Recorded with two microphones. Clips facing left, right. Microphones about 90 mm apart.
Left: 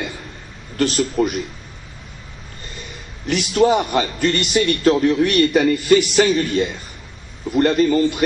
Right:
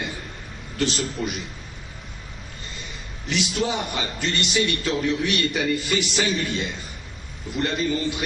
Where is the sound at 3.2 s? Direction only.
50° left (ahead or behind).